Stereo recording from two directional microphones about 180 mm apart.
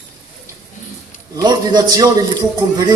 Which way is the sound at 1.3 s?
20° right (ahead or behind).